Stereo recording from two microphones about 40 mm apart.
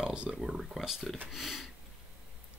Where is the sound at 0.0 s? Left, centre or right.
Right.